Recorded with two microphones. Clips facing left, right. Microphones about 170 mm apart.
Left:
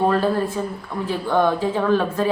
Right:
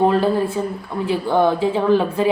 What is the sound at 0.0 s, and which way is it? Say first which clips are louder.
A woman's voice: right 3 dB; 15° right (ahead or behind).